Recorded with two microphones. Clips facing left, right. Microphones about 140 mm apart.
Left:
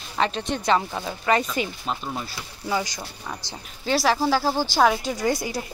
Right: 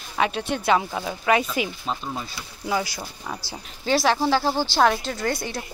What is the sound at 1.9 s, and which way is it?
Speech, 5° left (ahead or behind).